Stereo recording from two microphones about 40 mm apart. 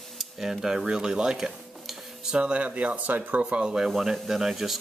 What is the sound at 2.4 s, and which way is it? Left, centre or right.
Speech, right.